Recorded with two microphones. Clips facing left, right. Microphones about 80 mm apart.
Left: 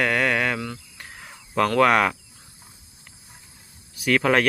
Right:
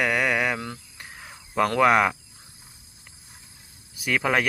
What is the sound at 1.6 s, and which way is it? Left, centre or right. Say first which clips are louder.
Speech: left 1 dB; centre.